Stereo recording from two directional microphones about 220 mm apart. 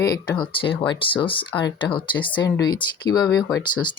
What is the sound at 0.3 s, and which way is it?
Speech, 20° left (ahead or behind).